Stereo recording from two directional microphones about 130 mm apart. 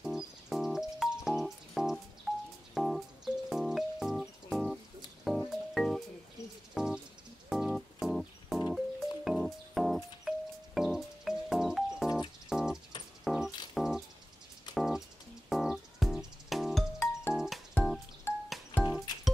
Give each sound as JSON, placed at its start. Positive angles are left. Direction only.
{"t": 0.0, "sound": "music", "side_deg": 0}
{"t": 18.3, "sound": "music", "side_deg": 15}